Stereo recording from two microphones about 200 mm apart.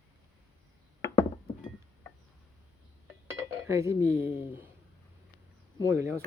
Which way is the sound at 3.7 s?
15° right (ahead or behind).